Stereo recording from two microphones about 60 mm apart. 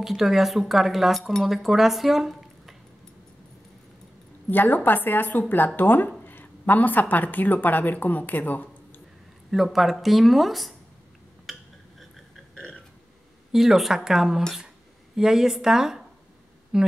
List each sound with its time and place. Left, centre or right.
0.0 s speech: centre
4.5 s a woman's voice: left
9.5 s speech: centre
11.5 s a sound: centre
12.5 s burping: centre
13.5 s speech: centre